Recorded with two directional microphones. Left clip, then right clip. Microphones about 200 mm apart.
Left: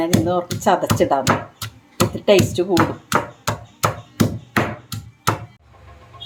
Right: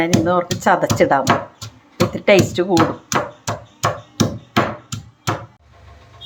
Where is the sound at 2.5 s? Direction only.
5° right (ahead or behind).